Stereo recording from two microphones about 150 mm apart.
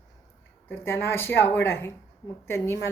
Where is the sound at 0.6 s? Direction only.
15° left (ahead or behind).